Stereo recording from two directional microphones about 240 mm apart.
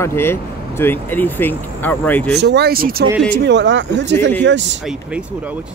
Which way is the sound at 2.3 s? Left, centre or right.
Right.